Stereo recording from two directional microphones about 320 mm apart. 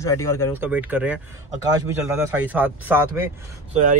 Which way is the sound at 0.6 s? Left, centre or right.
Centre.